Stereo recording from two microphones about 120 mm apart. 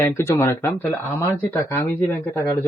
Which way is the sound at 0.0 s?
20° left (ahead or behind).